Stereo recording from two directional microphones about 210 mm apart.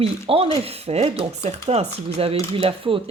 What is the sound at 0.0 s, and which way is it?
Speech, 25° right (ahead or behind).